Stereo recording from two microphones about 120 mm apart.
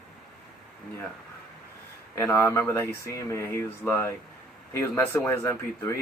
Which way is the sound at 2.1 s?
20° left (ahead or behind).